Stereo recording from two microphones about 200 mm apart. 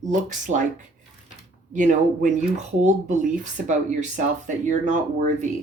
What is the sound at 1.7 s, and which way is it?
Speech, 40° right (ahead or behind).